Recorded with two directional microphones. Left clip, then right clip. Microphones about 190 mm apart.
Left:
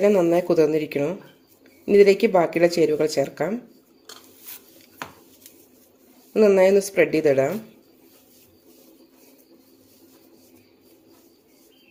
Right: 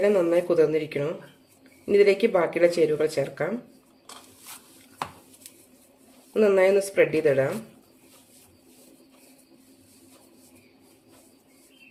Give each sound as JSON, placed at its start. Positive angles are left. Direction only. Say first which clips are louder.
{"t": 0.0, "sound": "a woman's voice", "louder": "left 3 dB", "side_deg": 25}
{"t": 6.3, "sound": "a woman's voice", "louder": "left 4 dB", "side_deg": 25}